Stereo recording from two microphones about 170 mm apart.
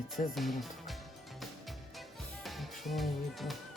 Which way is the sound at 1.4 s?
Centre (ahead or behind).